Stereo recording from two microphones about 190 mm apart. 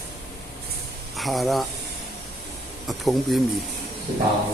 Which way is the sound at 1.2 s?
Centre (ahead or behind).